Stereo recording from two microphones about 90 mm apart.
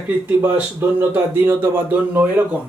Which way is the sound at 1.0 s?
25° right (ahead or behind).